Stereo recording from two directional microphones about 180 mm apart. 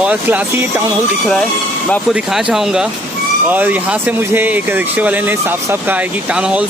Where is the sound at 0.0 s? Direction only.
10° right (ahead or behind).